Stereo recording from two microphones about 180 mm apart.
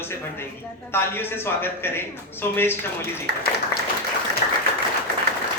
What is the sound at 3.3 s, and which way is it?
Speech, 65° right (ahead or behind).